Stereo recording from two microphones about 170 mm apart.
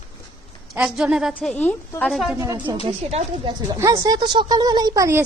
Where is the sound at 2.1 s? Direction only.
Centre (ahead or behind).